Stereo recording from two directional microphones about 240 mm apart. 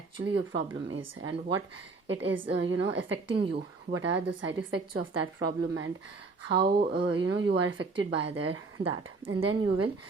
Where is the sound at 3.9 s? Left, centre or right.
Right.